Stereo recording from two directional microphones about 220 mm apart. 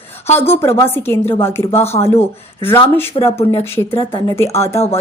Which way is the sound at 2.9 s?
10° left (ahead or behind).